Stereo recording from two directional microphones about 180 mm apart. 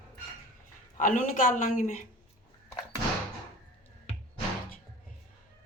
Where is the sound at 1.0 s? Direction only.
45° left (ahead or behind).